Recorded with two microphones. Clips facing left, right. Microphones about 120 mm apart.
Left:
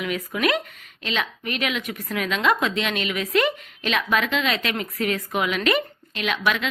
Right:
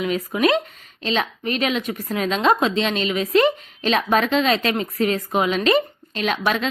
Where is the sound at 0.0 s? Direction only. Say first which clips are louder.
Right 4 dB; 30° right (ahead or behind).